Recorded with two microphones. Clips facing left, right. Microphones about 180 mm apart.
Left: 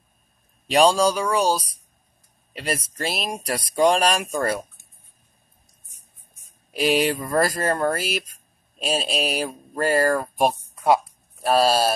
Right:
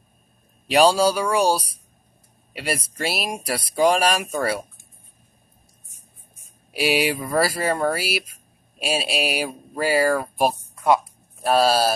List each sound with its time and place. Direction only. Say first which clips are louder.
0.7 s speech: right 1 dB; 5° right (ahead or behind)
6.7 s speech: left 1 dB; 5° right (ahead or behind)
10.7 s a sound: right 1 dB; 25° left (ahead or behind)
11.4 s speech: even; centre (ahead or behind)